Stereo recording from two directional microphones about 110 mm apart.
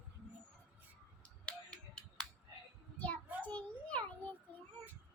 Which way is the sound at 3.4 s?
10° left (ahead or behind).